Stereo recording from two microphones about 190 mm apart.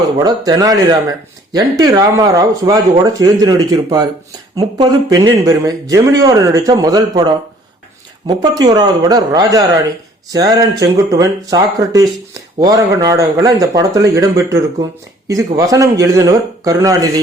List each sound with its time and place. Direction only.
0.2 s speech: 20° right (ahead or behind)